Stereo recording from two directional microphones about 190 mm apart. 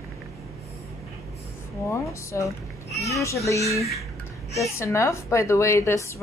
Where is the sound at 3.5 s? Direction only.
15° left (ahead or behind).